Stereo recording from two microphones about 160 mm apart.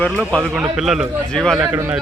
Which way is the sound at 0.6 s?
5° right (ahead or behind).